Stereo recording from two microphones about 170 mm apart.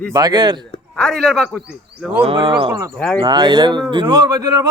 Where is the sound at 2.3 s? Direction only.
30° right (ahead or behind).